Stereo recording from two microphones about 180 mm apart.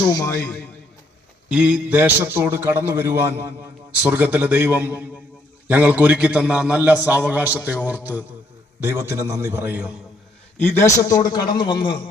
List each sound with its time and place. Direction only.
1.5 s a man's voice: 5° right (ahead or behind)
10.6 s a man's voice: 10° left (ahead or behind)